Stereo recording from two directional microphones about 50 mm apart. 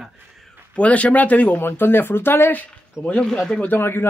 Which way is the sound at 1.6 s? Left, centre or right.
Left.